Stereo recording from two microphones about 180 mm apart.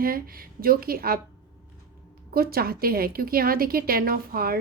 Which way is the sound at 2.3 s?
55° right (ahead or behind).